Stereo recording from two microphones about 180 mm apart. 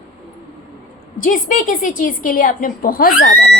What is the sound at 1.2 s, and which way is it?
A woman's voice, 50° left (ahead or behind).